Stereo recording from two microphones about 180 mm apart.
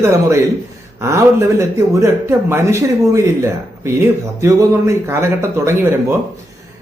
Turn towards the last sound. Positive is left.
turn(degrees=-15)  # may be behind; listen again after turning